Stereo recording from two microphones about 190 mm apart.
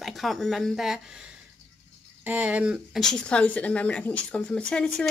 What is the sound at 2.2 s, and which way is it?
Speech, 10° right (ahead or behind).